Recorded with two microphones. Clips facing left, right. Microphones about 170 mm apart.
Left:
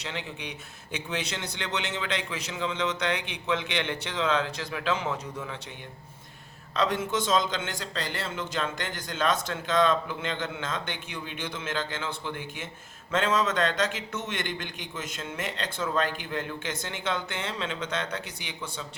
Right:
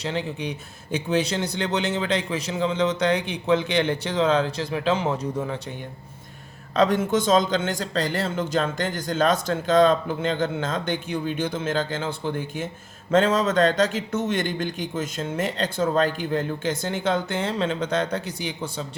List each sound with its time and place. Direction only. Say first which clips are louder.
0.0 s a man's voice: right 9 dB; 35° right (ahead or behind)
6.7 s a man's voice: right 7 dB; 45° right (ahead or behind)